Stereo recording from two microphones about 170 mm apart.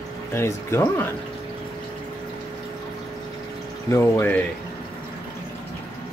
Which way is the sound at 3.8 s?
15° left (ahead or behind).